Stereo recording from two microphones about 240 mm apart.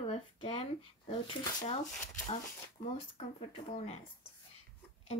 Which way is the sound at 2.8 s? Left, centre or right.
Left.